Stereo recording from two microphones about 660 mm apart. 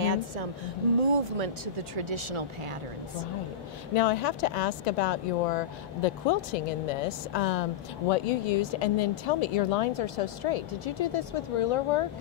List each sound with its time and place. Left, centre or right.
0.0 s music: right
1.1 s speech: right
3.9 s speech: left
8.1 s speech: left